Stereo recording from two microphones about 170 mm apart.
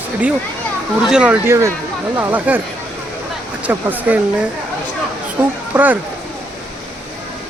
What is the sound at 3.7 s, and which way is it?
Speech, 10° right (ahead or behind).